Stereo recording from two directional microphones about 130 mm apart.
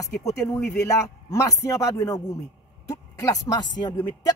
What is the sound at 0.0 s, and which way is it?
A man's voice, 25° left (ahead or behind).